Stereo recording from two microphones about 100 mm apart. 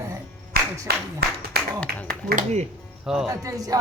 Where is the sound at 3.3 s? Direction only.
35° right (ahead or behind).